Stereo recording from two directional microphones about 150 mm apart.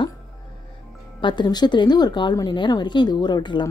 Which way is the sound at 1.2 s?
30° left (ahead or behind).